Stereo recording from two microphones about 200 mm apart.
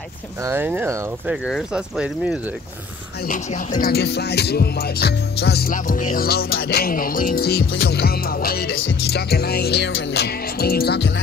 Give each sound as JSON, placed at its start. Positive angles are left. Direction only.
{"t": 0.4, "sound": "speech", "side_deg": -10}
{"t": 3.3, "sound": "music", "side_deg": 40}
{"t": 8.7, "sound": "music", "side_deg": 60}